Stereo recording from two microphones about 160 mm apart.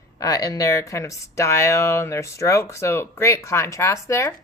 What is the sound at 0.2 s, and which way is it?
Speech, 20° left (ahead or behind).